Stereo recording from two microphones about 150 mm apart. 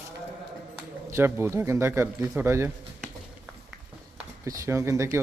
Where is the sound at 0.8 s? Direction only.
15° right (ahead or behind).